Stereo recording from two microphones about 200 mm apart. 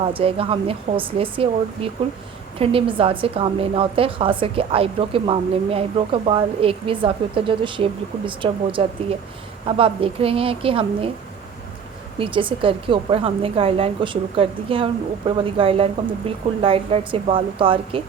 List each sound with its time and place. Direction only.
0.0 s a woman's voice: 25° right (ahead or behind)
12.2 s a woman's voice: 25° right (ahead or behind)